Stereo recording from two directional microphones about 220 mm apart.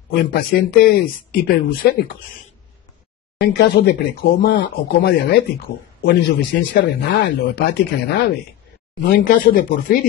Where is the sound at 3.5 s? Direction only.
45° left (ahead or behind).